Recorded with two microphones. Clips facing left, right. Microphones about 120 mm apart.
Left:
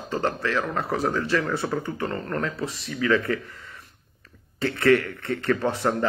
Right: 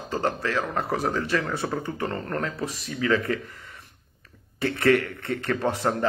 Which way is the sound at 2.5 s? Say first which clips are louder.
Left 1 dB; 30° left (ahead or behind).